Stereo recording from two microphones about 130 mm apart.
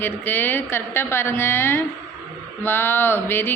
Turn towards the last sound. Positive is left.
turn(degrees=15)  # may be behind; listen again after turning